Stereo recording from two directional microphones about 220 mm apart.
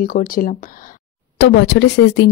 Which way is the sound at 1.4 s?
50° left (ahead or behind).